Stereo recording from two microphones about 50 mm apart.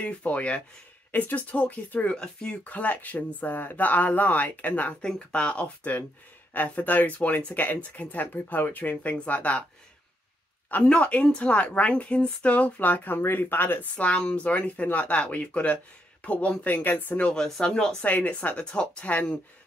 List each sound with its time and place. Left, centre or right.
0.0 s speech: left
2.1 s speech: left
2.7 s speech: left
5.0 s speech: left
6.5 s speech: left
10.7 s speech: left
13.9 s speech: left
17.2 s speech: centre
18.0 s speech: left
18.6 s speech: centre